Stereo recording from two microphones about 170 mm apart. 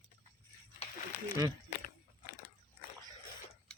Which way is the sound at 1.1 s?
75° left (ahead or behind).